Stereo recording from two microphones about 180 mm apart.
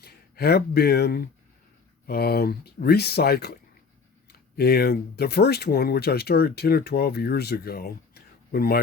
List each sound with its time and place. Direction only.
0.0 s speech: 60° left (ahead or behind)